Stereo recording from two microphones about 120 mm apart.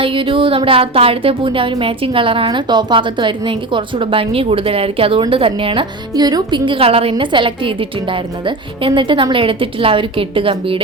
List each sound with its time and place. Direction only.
0.0 s a woman's voice: 45° right (ahead or behind)
6.1 s a woman's voice: 35° right (ahead or behind)